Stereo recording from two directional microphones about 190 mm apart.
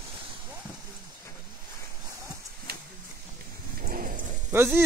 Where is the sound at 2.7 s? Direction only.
55° right (ahead or behind).